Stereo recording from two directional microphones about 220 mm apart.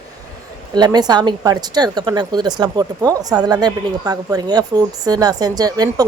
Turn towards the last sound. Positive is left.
turn(degrees=-15)  # may be behind; listen again after turning